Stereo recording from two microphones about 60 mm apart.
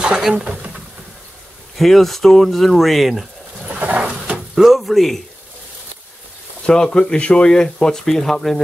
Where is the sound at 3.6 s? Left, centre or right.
Right.